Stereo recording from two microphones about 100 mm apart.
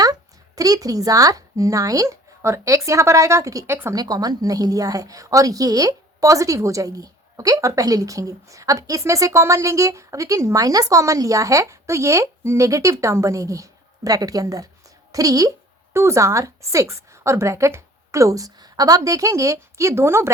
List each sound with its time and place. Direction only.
0.0 s a woman's voice: 35° right (ahead or behind)